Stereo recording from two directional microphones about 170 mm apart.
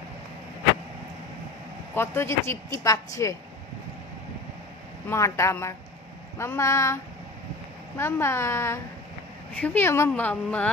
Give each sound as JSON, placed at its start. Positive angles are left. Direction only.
{"t": 2.0, "sound": "speech", "side_deg": 15}
{"t": 5.0, "sound": "speech", "side_deg": 15}
{"t": 8.0, "sound": "speech", "side_deg": 15}